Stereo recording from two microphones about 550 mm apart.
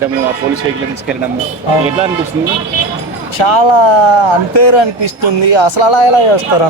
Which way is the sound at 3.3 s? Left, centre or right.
Left.